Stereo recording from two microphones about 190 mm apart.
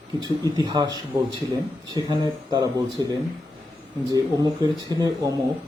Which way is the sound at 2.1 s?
20° right (ahead or behind).